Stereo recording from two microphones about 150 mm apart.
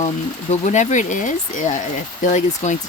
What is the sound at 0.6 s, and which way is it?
Speech, 55° left (ahead or behind).